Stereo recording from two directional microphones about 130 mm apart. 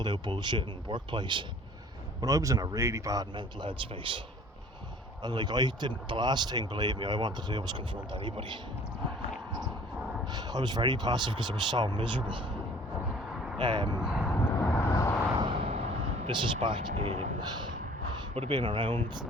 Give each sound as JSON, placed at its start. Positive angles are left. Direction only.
{"t": 0.0, "sound": "speech", "side_deg": -35}
{"t": 2.2, "sound": "speech", "side_deg": -25}
{"t": 5.2, "sound": "speech", "side_deg": -35}
{"t": 10.2, "sound": "speech", "side_deg": -30}
{"t": 13.6, "sound": "speech", "side_deg": -35}
{"t": 14.0, "sound": "speech", "side_deg": -10}
{"t": 14.3, "sound": "vehicle", "side_deg": 15}
{"t": 15.4, "sound": "artillery fire", "side_deg": -40}
{"t": 16.9, "sound": "speech", "side_deg": -65}
{"t": 18.3, "sound": "speech", "side_deg": -45}